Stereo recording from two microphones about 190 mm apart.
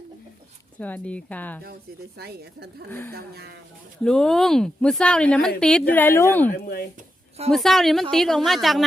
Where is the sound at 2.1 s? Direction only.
55° right (ahead or behind).